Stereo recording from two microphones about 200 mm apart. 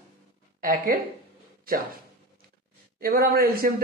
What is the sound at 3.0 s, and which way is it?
Speech, 50° right (ahead or behind).